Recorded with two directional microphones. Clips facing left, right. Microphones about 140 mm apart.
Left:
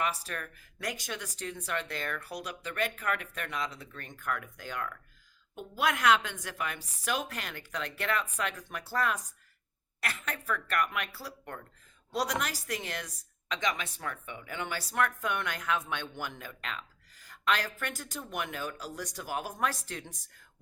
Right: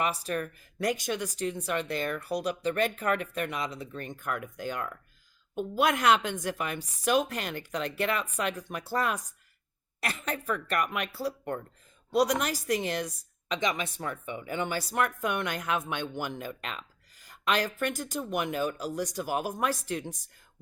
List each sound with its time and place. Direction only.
0.0 s a woman's voice: 20° right (ahead or behind)